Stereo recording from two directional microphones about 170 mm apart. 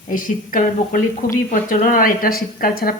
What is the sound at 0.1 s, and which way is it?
Speech, 50° left (ahead or behind).